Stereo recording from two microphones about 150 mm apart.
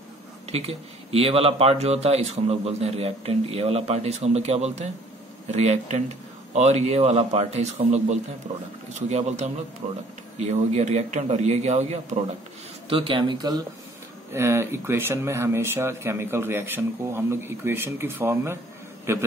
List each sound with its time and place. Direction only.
0.5 s speech: 40° right (ahead or behind)
9.8 s speech: 55° right (ahead or behind)
12.9 s speech: 35° right (ahead or behind); by 19.2 s 15° right (ahead or behind)